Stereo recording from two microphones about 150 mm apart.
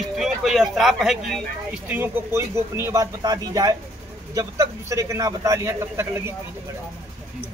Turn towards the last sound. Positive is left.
turn(degrees=-15)  # may be behind; listen again after turning